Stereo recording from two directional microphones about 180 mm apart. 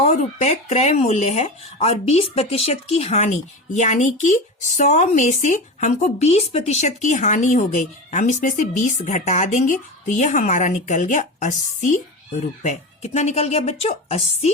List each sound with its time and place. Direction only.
0.0 s speech: 40° left (ahead or behind)